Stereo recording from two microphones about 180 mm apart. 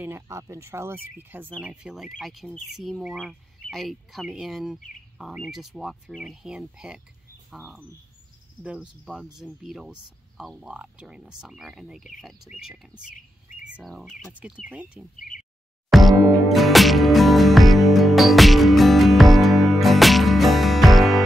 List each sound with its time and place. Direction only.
0.0 s speech: 15° right (ahead or behind)
15.1 s speech: 50° left (ahead or behind)
15.9 s music: centre (ahead or behind)